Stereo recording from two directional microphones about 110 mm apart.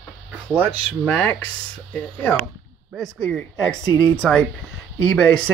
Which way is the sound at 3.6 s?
30° right (ahead or behind).